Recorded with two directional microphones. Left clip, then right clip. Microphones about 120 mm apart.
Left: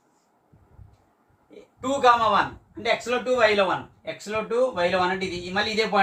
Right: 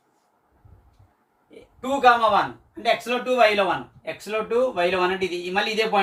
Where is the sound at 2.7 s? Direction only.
10° left (ahead or behind).